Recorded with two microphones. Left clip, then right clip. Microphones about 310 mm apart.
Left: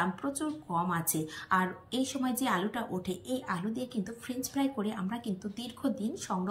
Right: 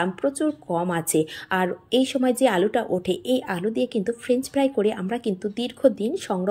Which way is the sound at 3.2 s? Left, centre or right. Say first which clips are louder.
Right 11 dB; right.